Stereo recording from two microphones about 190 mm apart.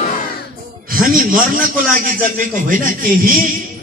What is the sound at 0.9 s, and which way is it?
A man's voice, 45° right (ahead or behind).